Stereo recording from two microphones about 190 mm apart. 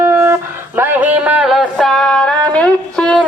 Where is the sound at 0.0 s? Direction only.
15° right (ahead or behind).